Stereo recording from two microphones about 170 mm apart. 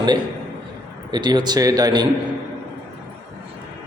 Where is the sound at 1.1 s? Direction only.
25° right (ahead or behind).